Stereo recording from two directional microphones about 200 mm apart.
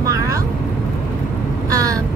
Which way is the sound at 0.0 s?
15° right (ahead or behind).